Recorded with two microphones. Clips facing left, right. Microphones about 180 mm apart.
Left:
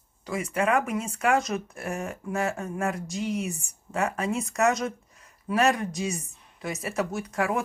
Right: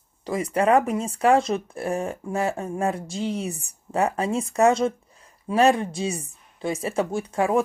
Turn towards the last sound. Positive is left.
turn(degrees=-25)  # may be behind; listen again after turning